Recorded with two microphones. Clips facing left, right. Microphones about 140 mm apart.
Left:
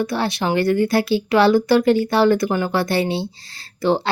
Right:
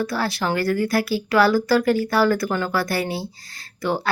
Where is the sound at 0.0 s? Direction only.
20° left (ahead or behind).